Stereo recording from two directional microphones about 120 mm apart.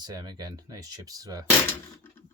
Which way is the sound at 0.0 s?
35° right (ahead or behind).